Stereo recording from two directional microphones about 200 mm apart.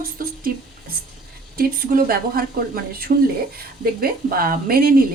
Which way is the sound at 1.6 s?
45° right (ahead or behind).